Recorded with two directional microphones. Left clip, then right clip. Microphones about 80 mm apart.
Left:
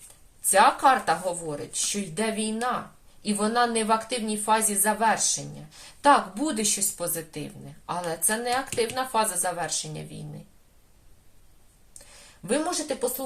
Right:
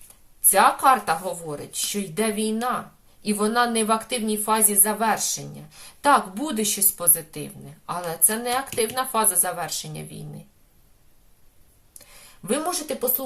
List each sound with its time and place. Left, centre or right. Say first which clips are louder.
0.5 s a woman's voice: right 2 dB; right
12.5 s speech: right 1 dB; right